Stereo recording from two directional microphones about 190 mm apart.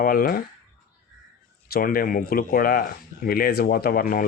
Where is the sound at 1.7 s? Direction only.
50° left (ahead or behind).